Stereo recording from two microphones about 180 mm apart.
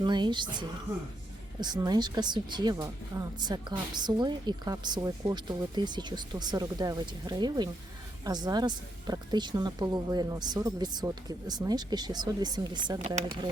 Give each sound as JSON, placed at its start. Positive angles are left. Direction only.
{"t": 0.0, "sound": "speech", "side_deg": -25}
{"t": 1.6, "sound": "speech", "side_deg": -25}